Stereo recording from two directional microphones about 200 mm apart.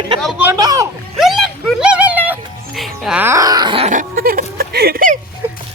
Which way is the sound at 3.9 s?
45° right (ahead or behind).